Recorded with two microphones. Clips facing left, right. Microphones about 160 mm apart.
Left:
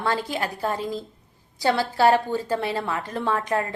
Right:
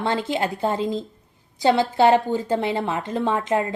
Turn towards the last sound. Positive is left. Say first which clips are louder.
# right 3 dB
turn(degrees=-20)  # may be behind; listen again after turning